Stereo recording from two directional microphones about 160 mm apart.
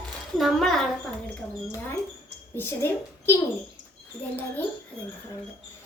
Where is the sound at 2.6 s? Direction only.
15° left (ahead or behind).